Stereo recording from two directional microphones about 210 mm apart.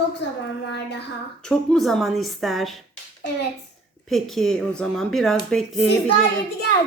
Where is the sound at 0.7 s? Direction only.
55° left (ahead or behind).